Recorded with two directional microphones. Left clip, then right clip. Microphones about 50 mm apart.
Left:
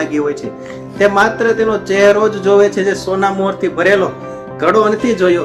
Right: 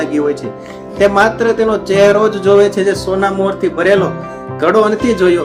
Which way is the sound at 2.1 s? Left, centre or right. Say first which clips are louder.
Right 1 dB; right.